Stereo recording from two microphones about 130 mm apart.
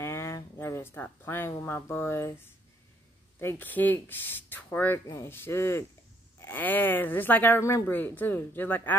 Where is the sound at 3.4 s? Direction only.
15° left (ahead or behind).